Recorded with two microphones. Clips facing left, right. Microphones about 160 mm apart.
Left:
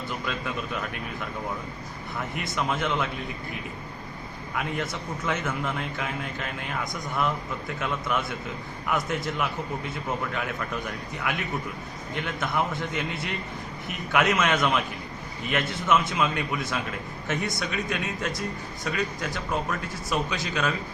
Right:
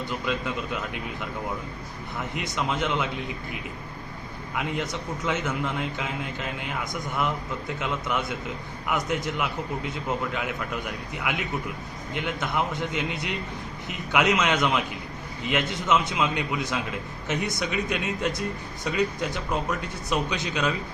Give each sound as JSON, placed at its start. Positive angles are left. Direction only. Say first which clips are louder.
{"t": 0.1, "sound": "a man's voice", "louder": "right 2 dB", "side_deg": -20}
{"t": 2.3, "sound": "a man's voice", "louder": "even", "side_deg": -20}
{"t": 4.7, "sound": "a man's voice", "louder": "right 1 dB", "side_deg": -20}